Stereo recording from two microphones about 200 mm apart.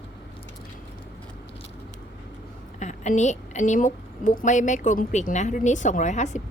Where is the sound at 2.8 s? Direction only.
35° left (ahead or behind).